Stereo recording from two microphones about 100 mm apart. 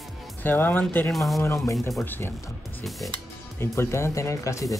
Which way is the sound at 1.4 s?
30° left (ahead or behind).